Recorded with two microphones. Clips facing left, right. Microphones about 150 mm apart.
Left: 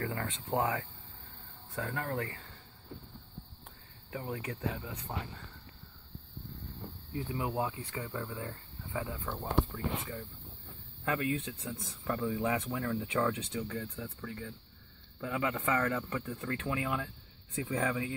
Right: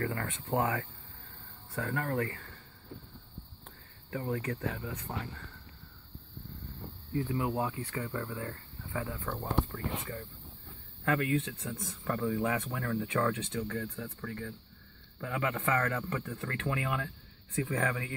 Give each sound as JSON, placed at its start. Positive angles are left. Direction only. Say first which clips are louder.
{"t": 0.0, "sound": "speech", "louder": "right 2 dB", "side_deg": 15}
{"t": 4.1, "sound": "speech", "louder": "right 4 dB", "side_deg": 15}
{"t": 7.2, "sound": "speech", "louder": "right 3 dB", "side_deg": 20}
{"t": 11.1, "sound": "speech", "louder": "right 3 dB", "side_deg": 15}